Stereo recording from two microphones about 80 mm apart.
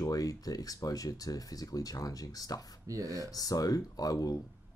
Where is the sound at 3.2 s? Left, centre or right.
Left.